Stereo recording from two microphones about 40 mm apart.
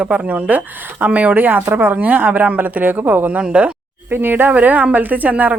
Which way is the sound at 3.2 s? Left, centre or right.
Right.